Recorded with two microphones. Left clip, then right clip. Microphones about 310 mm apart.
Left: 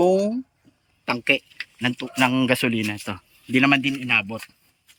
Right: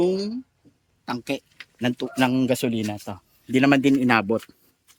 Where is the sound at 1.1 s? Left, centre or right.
Centre.